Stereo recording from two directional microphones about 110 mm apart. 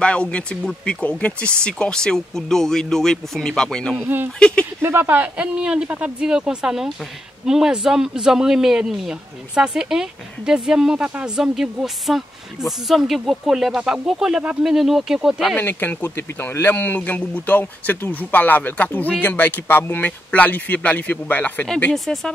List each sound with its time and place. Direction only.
0.0 s speech: 10° left (ahead or behind)
4.8 s speech: 20° right (ahead or behind); by 15.5 s 5° right (ahead or behind)
15.5 s speech: 15° left (ahead or behind)
21.9 s speech: centre (ahead or behind)